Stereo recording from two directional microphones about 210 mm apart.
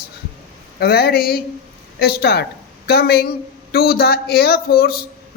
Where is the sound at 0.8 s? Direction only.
50° left (ahead or behind).